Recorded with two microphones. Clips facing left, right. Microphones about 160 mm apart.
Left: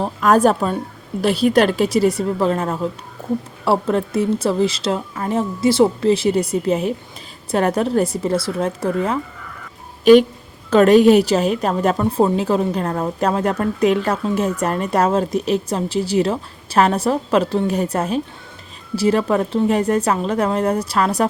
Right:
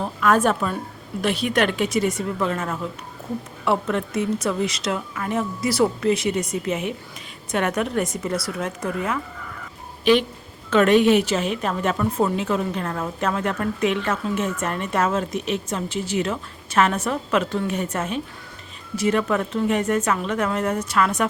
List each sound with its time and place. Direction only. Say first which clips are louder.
0.0 s a woman's voice: left 5 dB; 35° left (ahead or behind)
10.0 s a woman's voice: left 8 dB; 45° left (ahead or behind)